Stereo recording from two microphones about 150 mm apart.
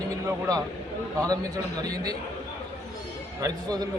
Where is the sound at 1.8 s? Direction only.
25° right (ahead or behind).